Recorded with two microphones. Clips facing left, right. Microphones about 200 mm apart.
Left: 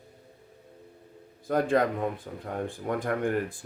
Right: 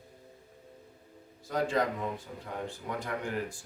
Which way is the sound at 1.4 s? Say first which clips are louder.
Left 5 dB; 55° left (ahead or behind).